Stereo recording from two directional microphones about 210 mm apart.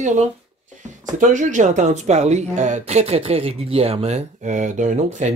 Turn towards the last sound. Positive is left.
turn(degrees=-35)  # may be behind; listen again after turning